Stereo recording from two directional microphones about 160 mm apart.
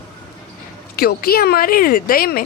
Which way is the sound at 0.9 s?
70° left (ahead or behind).